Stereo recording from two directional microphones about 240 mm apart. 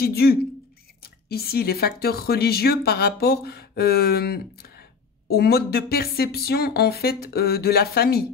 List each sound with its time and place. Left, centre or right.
0.0 s speech: left